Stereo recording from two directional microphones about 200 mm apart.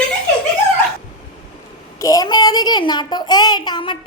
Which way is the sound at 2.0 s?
15° left (ahead or behind).